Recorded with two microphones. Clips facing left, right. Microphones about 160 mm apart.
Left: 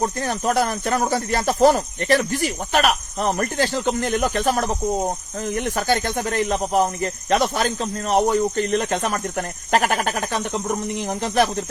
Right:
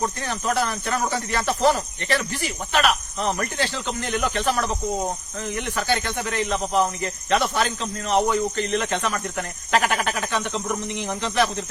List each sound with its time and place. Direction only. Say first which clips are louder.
0.0 s speech: left 4 dB; 40° left (ahead or behind)